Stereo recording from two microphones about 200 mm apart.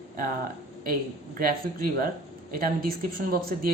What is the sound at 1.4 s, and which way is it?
A man's voice, 45° right (ahead or behind).